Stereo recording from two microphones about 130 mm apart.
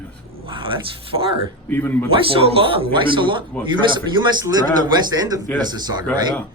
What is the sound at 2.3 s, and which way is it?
Speech, 45° right (ahead or behind).